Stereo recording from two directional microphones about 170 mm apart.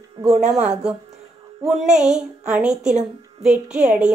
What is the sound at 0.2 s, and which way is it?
Speech, 40° right (ahead or behind).